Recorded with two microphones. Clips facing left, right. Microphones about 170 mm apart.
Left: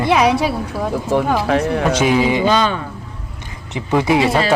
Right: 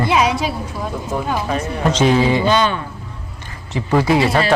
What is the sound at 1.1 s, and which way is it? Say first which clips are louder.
Speech: left 5 dB; 80° left.